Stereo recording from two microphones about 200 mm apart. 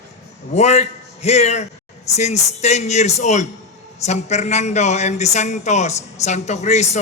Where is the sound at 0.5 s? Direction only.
35° left (ahead or behind).